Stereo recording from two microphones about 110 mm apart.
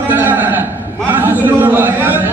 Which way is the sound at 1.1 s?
15° right (ahead or behind).